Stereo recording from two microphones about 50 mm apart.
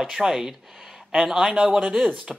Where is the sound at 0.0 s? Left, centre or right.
Centre.